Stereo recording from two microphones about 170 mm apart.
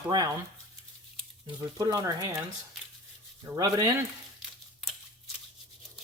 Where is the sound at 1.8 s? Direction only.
20° right (ahead or behind).